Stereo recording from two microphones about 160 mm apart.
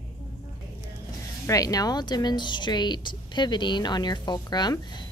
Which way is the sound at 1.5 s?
20° left (ahead or behind).